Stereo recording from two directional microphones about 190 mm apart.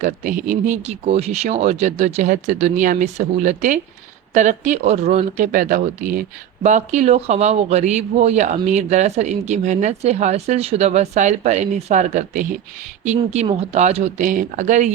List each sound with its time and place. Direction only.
0.0 s speech: 45° right (ahead or behind)